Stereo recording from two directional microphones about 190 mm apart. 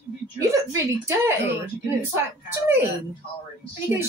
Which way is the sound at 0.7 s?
15° right (ahead or behind).